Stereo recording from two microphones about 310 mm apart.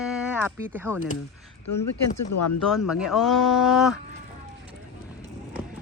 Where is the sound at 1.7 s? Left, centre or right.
Left.